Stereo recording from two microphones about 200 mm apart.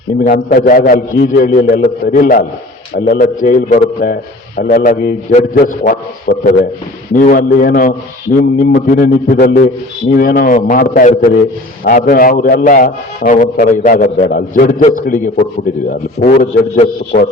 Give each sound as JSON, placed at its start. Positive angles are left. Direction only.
{"t": 0.2, "sound": "a man's voice", "side_deg": 40}